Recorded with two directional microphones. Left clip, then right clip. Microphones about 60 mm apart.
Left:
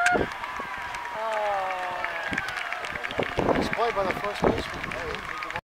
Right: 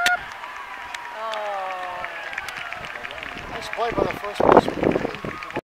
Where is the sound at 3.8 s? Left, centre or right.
Right.